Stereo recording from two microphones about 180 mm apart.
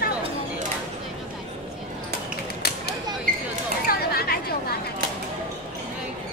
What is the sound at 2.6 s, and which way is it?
Creak, 65° left (ahead or behind).